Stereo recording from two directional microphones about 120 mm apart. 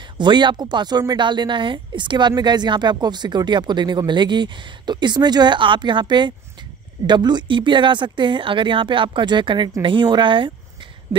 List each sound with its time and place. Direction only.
0.0 s speech: 40° right (ahead or behind)